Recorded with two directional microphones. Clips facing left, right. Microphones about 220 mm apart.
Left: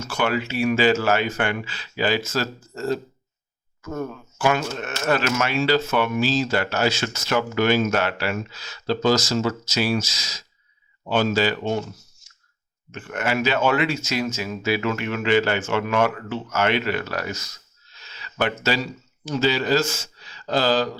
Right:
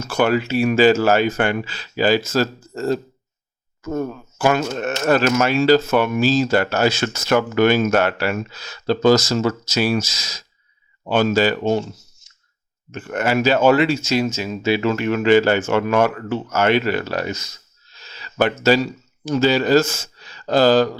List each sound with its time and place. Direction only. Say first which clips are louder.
0.1 s speech: right 6 dB; 45° right (ahead or behind)
12.2 s clicking: left 1 dB; 20° right (ahead or behind)
12.9 s speech: right 5 dB; 40° right (ahead or behind)
17.0 s speech: right 5 dB; 25° right (ahead or behind)
17.9 s a sound: right 8 dB; 35° right (ahead or behind)
19.2 s speech: right 5 dB; 45° right (ahead or behind)